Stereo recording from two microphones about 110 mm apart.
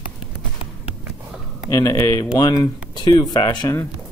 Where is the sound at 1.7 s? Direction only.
30° left (ahead or behind).